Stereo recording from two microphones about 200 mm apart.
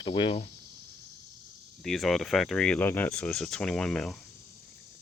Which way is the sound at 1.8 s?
Centre (ahead or behind).